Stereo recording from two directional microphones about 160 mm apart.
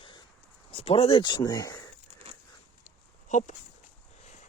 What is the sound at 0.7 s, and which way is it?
Speech, 35° left (ahead or behind).